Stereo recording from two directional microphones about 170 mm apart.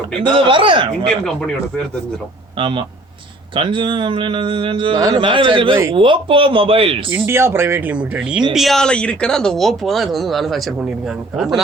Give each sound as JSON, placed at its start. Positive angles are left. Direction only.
{"t": 0.1, "sound": "speech", "side_deg": -30}
{"t": 1.0, "sound": "speech", "side_deg": 5}
{"t": 2.6, "sound": "speech", "side_deg": -30}
{"t": 7.1, "sound": "speech", "side_deg": -15}